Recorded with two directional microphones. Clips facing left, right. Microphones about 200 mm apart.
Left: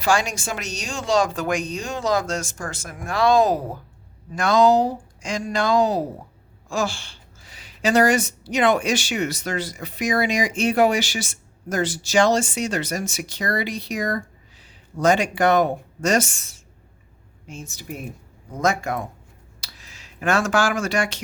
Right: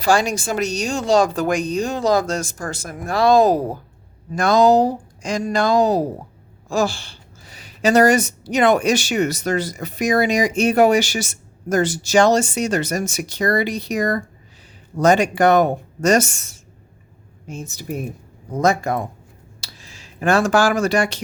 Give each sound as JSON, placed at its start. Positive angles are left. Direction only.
{"t": 0.0, "sound": "speech", "side_deg": -35}
{"t": 17.4, "sound": "speech", "side_deg": -40}